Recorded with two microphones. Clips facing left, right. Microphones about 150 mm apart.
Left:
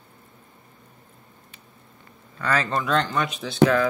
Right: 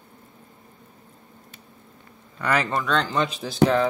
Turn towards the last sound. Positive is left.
turn(degrees=-30)  # may be behind; listen again after turning